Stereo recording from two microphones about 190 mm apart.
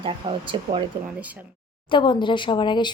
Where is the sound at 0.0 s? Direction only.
25° right (ahead or behind).